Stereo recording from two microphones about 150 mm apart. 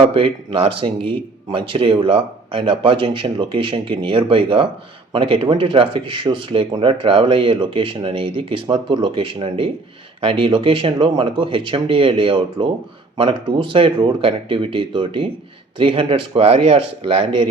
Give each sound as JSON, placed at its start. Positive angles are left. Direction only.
{"t": 0.0, "sound": "speech", "side_deg": -35}